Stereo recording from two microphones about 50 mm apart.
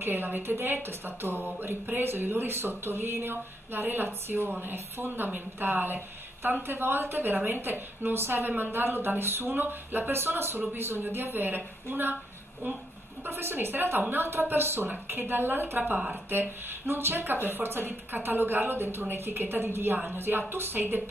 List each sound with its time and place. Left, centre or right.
0.0 s a woman's voice: right
13.2 s a woman's voice: right